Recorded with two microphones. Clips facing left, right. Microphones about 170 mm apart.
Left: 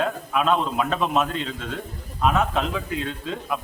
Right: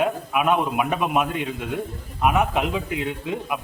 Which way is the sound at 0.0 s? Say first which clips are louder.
Right 2 dB; 15° right (ahead or behind).